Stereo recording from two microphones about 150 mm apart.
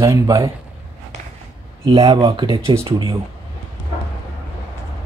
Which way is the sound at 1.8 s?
30° right (ahead or behind).